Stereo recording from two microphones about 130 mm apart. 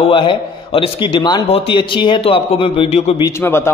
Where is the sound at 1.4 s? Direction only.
50° left (ahead or behind).